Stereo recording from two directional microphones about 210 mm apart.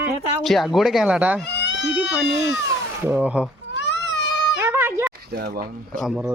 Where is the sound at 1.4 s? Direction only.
55° left (ahead or behind).